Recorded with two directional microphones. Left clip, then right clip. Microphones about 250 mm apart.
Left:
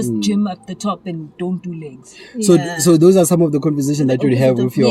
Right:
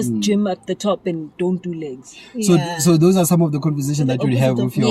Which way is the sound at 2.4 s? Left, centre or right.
Centre.